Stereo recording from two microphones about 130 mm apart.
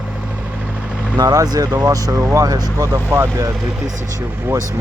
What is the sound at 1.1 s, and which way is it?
Speech, 30° right (ahead or behind).